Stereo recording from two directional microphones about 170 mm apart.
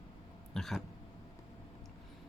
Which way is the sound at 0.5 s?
5° left (ahead or behind).